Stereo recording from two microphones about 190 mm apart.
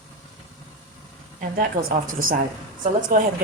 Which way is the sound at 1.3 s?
50° right (ahead or behind).